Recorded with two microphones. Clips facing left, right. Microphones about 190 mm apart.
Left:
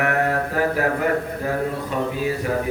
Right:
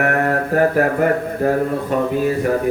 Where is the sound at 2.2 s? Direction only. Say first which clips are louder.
Right 6 dB; 50° right (ahead or behind).